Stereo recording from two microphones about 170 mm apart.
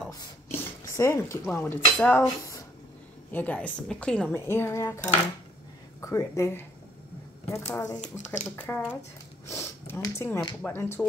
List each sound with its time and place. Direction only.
0.1 s speech: 20° left (ahead or behind)
9.5 s sniff: 15° left (ahead or behind)
10.6 s speech: 15° left (ahead or behind)